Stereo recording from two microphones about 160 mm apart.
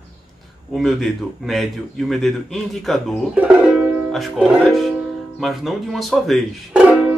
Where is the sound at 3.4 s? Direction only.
10° right (ahead or behind).